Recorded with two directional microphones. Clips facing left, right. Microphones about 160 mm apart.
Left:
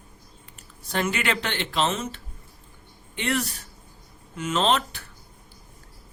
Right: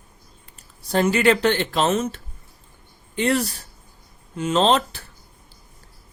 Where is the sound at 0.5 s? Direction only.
35° right (ahead or behind).